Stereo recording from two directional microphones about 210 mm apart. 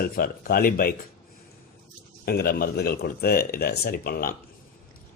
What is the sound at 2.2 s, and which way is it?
Speech, 45° left (ahead or behind).